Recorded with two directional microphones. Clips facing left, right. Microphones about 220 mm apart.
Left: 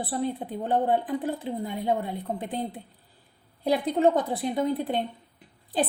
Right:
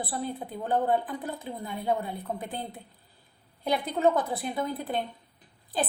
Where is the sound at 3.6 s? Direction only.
30° left (ahead or behind).